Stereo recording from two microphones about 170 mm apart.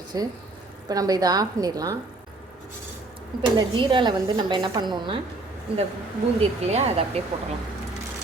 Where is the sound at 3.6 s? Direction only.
25° right (ahead or behind).